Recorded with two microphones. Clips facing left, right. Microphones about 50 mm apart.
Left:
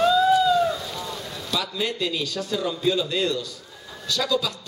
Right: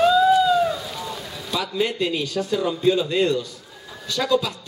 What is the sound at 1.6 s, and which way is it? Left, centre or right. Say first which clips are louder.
A man's voice: right 4 dB; centre.